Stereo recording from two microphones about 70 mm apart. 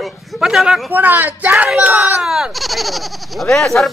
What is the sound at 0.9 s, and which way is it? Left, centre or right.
Speech, right.